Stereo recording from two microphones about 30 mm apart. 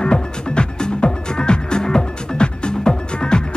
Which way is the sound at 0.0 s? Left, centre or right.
Left.